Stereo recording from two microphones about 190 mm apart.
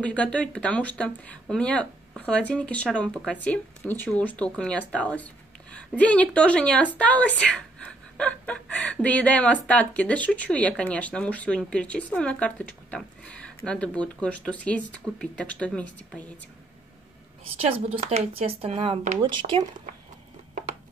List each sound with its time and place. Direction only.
0.0 s speech: 5° left (ahead or behind)
17.6 s speech: 30° right (ahead or behind)